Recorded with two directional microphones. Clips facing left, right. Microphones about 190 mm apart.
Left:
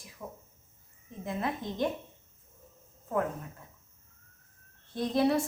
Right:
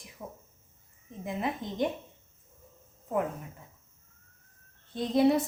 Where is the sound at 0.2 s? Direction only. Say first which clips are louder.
Even; 20° right (ahead or behind).